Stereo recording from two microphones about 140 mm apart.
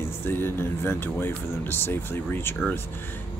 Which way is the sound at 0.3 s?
15° left (ahead or behind).